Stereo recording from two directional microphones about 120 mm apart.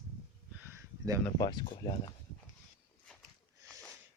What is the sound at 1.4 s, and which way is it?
Speech, 35° left (ahead or behind).